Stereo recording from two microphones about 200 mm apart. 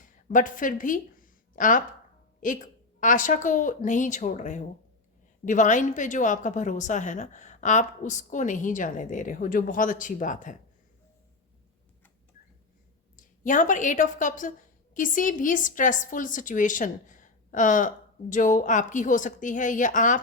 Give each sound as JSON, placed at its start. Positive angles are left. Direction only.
{"t": 0.0, "sound": "a sound", "side_deg": 40}
{"t": 2.4, "sound": "a woman's voice", "side_deg": 40}
{"t": 13.1, "sound": "a woman's voice", "side_deg": 40}